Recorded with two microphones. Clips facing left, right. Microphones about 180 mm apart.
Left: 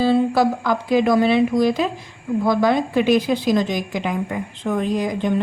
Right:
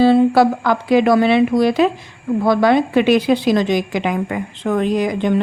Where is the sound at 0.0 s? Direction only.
70° right (ahead or behind).